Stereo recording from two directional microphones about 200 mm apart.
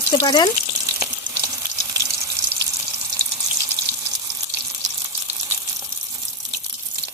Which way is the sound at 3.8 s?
20° right (ahead or behind).